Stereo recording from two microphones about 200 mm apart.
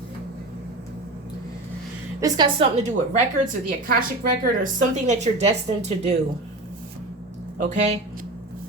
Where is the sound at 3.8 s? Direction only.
45° right (ahead or behind).